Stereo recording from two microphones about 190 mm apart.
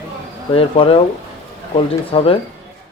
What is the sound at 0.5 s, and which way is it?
Speech, 30° left (ahead or behind).